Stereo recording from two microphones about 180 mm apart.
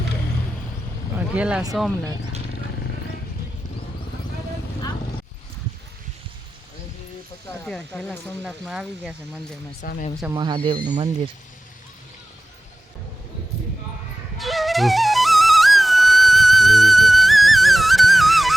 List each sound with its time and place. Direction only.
1.3 s speech: 5° right (ahead or behind)
7.6 s speech: centre (ahead or behind)
9.8 s speech: 55° left (ahead or behind)
10.3 s speech: 25° right (ahead or behind)
14.3 s music: centre (ahead or behind)